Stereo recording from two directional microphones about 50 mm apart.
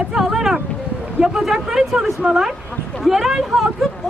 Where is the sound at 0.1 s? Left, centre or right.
Centre.